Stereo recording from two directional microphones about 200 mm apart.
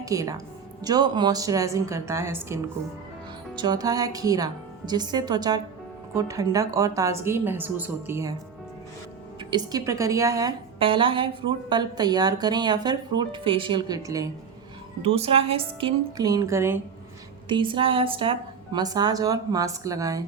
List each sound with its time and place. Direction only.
0.0 s a woman's voice: 15° right (ahead or behind)
9.4 s a woman's voice: 20° right (ahead or behind)
15.0 s a woman's voice: 30° right (ahead or behind); by 16.8 s 15° right (ahead or behind)
17.5 s a woman's voice: 25° right (ahead or behind)